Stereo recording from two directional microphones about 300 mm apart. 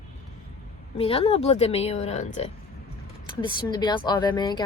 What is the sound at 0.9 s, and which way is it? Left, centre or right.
A woman's voice, centre.